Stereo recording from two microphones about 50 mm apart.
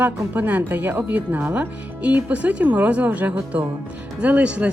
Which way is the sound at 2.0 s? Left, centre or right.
Right.